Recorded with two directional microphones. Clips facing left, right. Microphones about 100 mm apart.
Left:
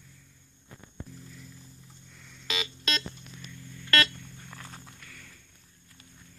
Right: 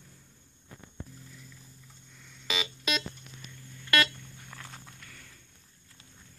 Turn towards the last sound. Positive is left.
turn(degrees=10)  # may be behind; listen again after turning